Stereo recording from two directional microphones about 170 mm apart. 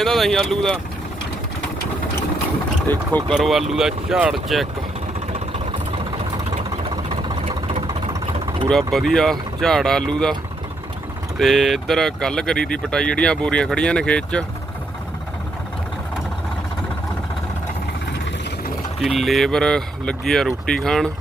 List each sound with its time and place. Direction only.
0.0 s speech: centre (ahead or behind)
2.8 s speech: 10° left (ahead or behind)
5.9 s vehicle: 30° right (ahead or behind)
8.9 s speech: centre (ahead or behind)
11.3 s speech: centre (ahead or behind)
18.9 s speech: centre (ahead or behind)